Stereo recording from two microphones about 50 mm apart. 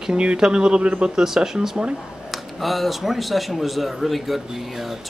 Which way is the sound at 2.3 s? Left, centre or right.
Centre.